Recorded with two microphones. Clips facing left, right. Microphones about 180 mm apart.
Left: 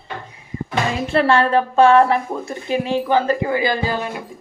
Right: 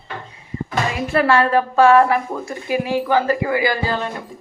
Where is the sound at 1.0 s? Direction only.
25° left (ahead or behind).